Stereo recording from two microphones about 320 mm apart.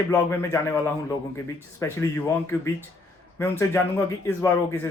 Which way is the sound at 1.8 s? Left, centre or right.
Centre.